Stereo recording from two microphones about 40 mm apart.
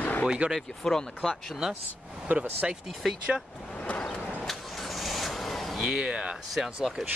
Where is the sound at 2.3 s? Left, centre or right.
Right.